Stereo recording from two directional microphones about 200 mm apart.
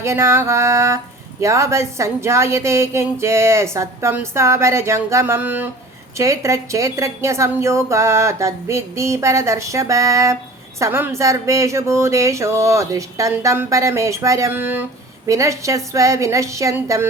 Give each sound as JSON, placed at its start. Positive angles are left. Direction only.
{"t": 0.0, "sound": "a woman's voice", "side_deg": -15}